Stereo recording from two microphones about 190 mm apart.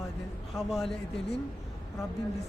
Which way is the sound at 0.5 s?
Centre (ahead or behind).